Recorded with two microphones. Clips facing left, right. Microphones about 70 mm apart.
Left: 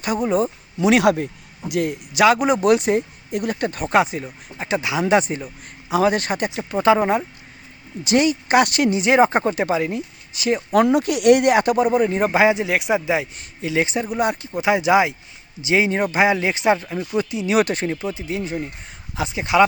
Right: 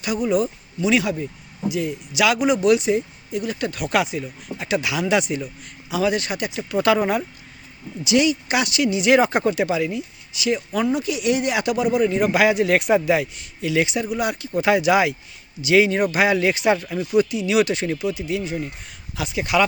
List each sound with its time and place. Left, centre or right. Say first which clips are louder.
0.0 s speech: left 1 dB; left
0.8 s speech: left 5 dB; left
2.2 s speech: left 2 dB; left
6.6 s speech: left 2 dB; left
8.0 s a woman's voice: left 1 dB; left
9.0 s speech: left 1 dB; left
10.7 s speech: left 5 dB; left
11.5 s speech: left 4 dB; left
12.6 s speech: right 3 dB; centre
13.6 s speech: even; left
14.5 s speech: even; centre; by 17.8 s left
17.8 s speech: right 1 dB; left